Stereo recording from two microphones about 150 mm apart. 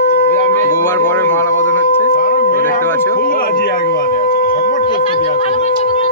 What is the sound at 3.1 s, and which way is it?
Speech, 75° left (ahead or behind).